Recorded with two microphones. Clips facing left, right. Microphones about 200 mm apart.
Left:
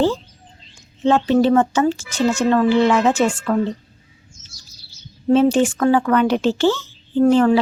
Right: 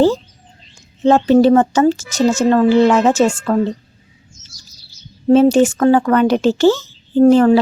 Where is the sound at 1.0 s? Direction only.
45° right (ahead or behind).